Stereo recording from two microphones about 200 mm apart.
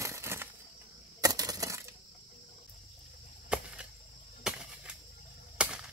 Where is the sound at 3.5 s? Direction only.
5° right (ahead or behind).